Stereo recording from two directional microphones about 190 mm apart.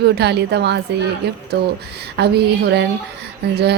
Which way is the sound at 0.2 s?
60° right (ahead or behind).